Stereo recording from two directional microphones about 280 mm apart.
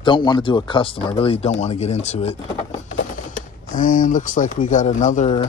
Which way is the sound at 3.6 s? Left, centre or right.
Left.